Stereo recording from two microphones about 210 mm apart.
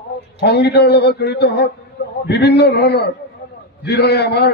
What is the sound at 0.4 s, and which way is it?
A man's voice, 55° left (ahead or behind).